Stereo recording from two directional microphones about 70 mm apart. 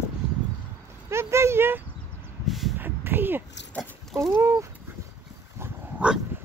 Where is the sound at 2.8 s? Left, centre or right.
Right.